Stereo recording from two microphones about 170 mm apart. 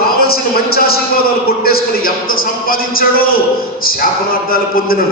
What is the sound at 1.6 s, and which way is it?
A man's voice, 60° left (ahead or behind).